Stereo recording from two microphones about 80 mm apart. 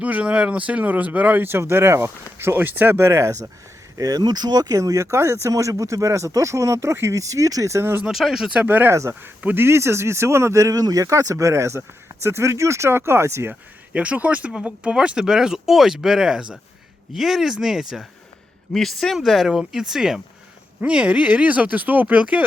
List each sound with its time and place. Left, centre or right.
0.0 s speech: centre; by 3.5 s right
3.9 s speech: right
8.1 s speech: centre
8.5 s speech: right
9.4 s speech: centre
9.6 s speech: right
13.5 s speech: centre